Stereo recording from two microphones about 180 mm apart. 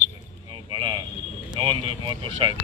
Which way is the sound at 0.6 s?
30° right (ahead or behind).